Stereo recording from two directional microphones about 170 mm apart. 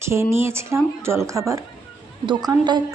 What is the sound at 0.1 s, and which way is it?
A woman's voice, 15° right (ahead or behind).